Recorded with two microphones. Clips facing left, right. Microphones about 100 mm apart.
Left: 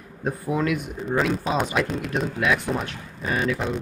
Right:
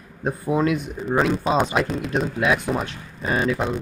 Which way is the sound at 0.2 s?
25° right (ahead or behind).